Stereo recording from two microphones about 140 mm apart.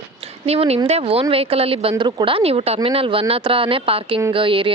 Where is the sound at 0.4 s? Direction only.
45° right (ahead or behind).